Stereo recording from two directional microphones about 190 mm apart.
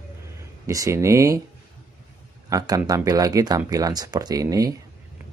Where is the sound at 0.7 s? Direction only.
15° right (ahead or behind).